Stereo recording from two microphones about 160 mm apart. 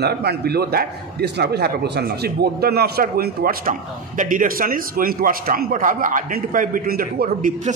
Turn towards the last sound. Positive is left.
turn(degrees=-60)  # may be behind; listen again after turning